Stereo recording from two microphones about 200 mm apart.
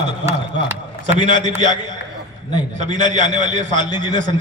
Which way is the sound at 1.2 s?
35° right (ahead or behind).